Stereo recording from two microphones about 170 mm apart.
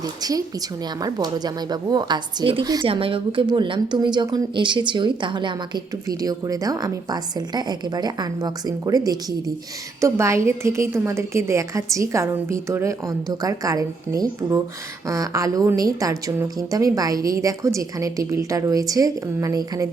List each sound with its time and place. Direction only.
0.0 s a woman's voice: 20° right (ahead or behind)